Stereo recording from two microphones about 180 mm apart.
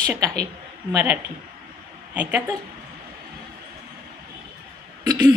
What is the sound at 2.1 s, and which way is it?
Speech, 10° right (ahead or behind).